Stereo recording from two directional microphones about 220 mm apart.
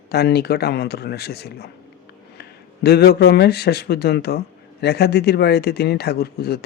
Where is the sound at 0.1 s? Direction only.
45° left (ahead or behind).